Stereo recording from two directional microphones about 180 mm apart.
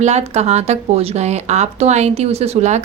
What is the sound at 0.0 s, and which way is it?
Speech, 40° right (ahead or behind).